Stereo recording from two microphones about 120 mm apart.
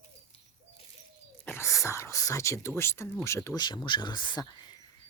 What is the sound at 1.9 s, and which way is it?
Speech, 25° left (ahead or behind).